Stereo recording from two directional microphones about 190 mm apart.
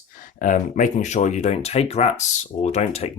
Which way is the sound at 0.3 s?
45° left (ahead or behind).